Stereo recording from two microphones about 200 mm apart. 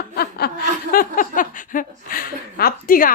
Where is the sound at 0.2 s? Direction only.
50° left (ahead or behind).